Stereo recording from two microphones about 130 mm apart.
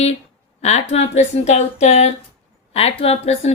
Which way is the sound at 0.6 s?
60° left (ahead or behind).